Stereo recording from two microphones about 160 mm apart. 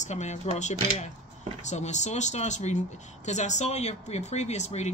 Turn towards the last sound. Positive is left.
turn(degrees=45)  # may be behind; listen again after turning